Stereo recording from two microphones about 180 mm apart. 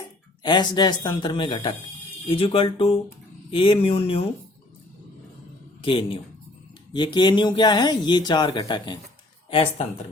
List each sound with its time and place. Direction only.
0.4 s speech: 25° left (ahead or behind)
5.8 s speech: 30° left (ahead or behind)